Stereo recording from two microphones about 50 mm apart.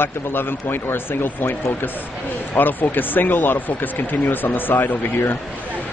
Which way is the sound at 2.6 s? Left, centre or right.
Left.